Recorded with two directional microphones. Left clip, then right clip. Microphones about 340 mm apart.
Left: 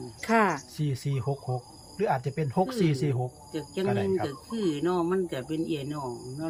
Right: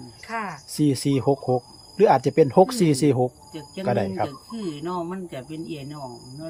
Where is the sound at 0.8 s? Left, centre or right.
Right.